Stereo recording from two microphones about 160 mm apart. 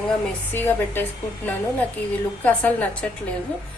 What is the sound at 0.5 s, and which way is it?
Speech, 15° left (ahead or behind).